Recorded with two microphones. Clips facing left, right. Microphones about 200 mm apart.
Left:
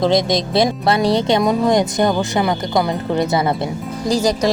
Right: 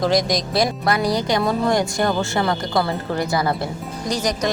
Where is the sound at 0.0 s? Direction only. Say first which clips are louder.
Left 3 dB; 25° left (ahead or behind).